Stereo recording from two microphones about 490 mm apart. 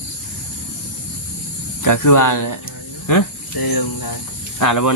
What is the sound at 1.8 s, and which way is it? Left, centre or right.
Speech, left.